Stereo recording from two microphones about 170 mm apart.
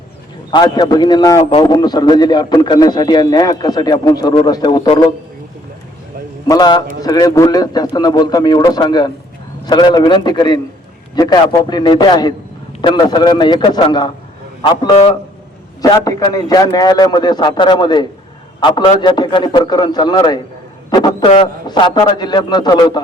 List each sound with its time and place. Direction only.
0.5 s a man's voice: 25° left (ahead or behind)
6.5 s a man's voice: 25° left (ahead or behind)